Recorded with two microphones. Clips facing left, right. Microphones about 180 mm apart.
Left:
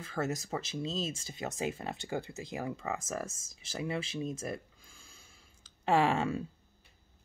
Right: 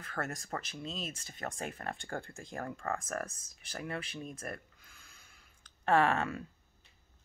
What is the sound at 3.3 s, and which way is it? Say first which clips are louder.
Speech: left 5 dB; 90° left.